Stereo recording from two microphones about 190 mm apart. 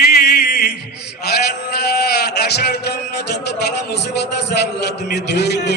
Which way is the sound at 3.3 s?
60° left (ahead or behind).